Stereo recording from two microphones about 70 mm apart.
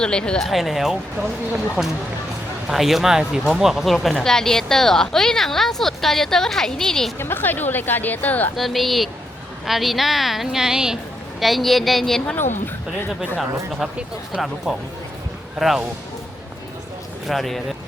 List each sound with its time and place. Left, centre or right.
0.0 s speech: centre
7.2 s a woman's voice: left
8.5 s speech: centre
14.4 s speech: centre
17.2 s speech: centre